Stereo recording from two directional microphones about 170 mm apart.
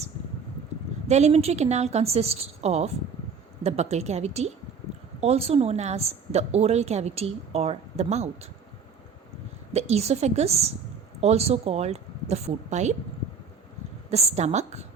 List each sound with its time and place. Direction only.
1.0 s a woman's voice: 40° right (ahead or behind)
9.7 s a woman's voice: 40° right (ahead or behind)
14.1 s a woman's voice: 40° right (ahead or behind)